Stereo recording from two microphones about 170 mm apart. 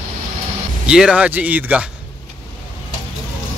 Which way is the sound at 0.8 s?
5° right (ahead or behind).